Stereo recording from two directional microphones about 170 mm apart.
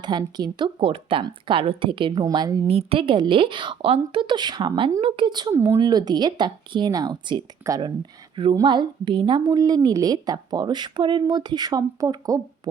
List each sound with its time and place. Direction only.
0.0 s speech: 25° right (ahead or behind)